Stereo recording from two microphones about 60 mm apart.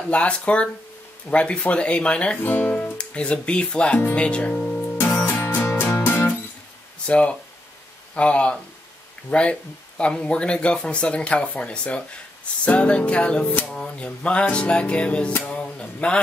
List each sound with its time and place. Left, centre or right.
0.1 s speech: centre
2.4 s speech: left
4.9 s music: left
7.1 s speech: left
13.7 s a sound: centre
14.0 s speech: left
15.4 s mantra: centre